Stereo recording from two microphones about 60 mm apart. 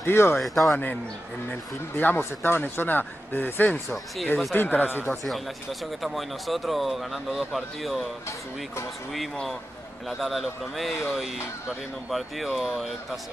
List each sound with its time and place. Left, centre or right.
0.0 s speech: left
0.4 s speech: centre
1.5 s speech: left
5.1 s speech: centre
9.1 s speech: centre